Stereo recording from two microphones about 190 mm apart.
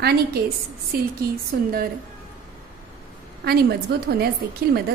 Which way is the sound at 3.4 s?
55° right (ahead or behind).